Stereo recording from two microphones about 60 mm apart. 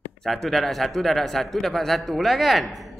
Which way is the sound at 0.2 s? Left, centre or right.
Centre.